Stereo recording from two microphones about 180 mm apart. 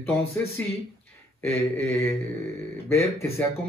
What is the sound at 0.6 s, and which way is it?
Speech, 10° left (ahead or behind).